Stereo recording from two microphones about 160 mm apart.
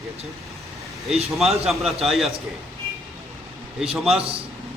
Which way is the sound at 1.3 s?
Centre (ahead or behind).